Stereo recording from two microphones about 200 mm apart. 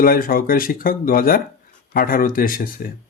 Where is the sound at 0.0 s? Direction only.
45° left (ahead or behind).